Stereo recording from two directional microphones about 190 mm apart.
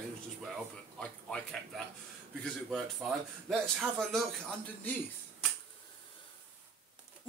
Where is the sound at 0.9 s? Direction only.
5° left (ahead or behind).